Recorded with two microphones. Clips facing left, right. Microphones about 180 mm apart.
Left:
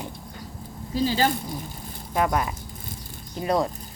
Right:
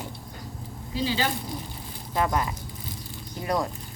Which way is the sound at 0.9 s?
45° left (ahead or behind).